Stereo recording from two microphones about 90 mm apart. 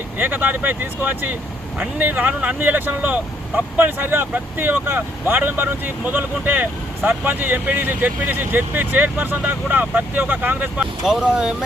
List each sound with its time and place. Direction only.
0.2 s speech: 20° right (ahead or behind)
11.0 s speech: 5° right (ahead or behind)